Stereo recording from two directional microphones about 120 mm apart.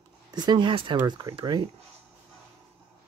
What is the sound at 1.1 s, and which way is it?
Speech, 30° right (ahead or behind).